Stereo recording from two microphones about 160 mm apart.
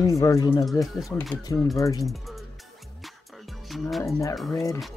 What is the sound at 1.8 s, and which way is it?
Speech, 20° left (ahead or behind).